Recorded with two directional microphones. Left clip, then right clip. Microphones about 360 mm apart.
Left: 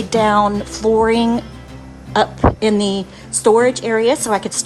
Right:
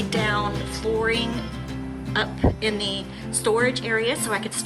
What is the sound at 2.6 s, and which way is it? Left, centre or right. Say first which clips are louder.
A woman's voice: left 8 dB; centre.